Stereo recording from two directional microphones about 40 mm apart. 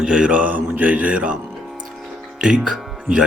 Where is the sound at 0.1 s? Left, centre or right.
Right.